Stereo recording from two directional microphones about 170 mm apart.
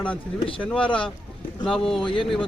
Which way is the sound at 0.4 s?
30° left (ahead or behind).